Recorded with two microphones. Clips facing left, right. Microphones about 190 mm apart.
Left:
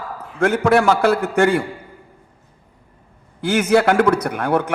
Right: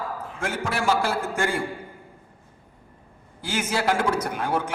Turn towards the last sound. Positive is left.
turn(degrees=65)  # may be behind; listen again after turning